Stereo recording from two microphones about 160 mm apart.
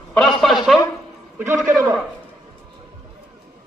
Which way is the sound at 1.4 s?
10° right (ahead or behind).